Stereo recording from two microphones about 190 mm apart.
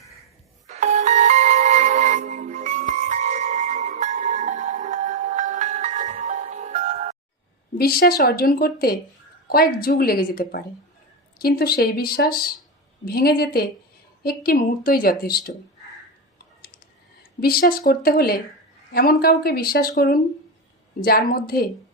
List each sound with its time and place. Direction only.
0.7 s music: 40° right (ahead or behind)
7.8 s a woman's voice: 55° left (ahead or behind)
17.4 s a woman's voice: 50° left (ahead or behind)